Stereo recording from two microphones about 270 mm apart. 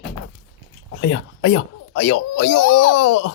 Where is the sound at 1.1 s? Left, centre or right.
Left.